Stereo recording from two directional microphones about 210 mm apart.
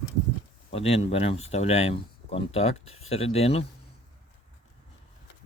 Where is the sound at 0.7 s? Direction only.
30° left (ahead or behind).